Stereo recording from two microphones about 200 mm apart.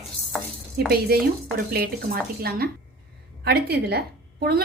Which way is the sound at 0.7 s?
50° right (ahead or behind).